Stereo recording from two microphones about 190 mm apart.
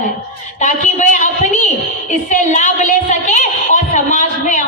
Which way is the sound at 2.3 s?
40° left (ahead or behind).